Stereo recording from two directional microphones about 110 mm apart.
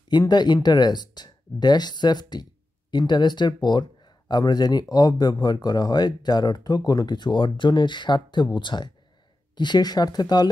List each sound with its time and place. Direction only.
0.1 s speech: 40° left (ahead or behind)